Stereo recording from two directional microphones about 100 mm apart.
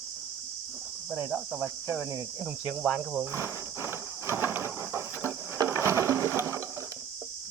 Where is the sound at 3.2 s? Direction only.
25° right (ahead or behind).